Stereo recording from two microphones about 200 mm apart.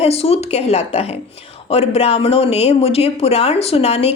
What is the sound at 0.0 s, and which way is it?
A woman's voice, 30° left (ahead or behind).